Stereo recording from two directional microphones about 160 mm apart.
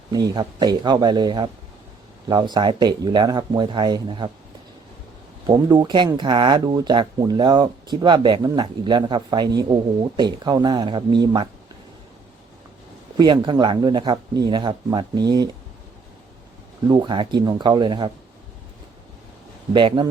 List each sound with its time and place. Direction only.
0.1 s speech: 25° right (ahead or behind)
5.5 s speech: 25° right (ahead or behind)
13.1 s speech: 25° right (ahead or behind)
16.8 s speech: 25° right (ahead or behind)
19.7 s speech: 30° right (ahead or behind)